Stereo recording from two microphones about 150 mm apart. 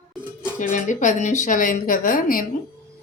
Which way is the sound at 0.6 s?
60° left (ahead or behind).